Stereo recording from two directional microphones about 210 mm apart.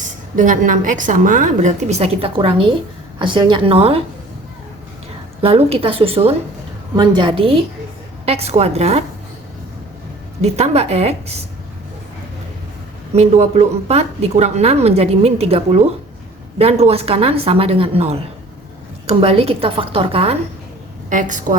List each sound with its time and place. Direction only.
0.3 s a woman's voice: 40° right (ahead or behind)
5.4 s a woman's voice: 30° right (ahead or behind)
10.4 s a woman's voice: 30° right (ahead or behind)
13.1 s a woman's voice: 30° right (ahead or behind)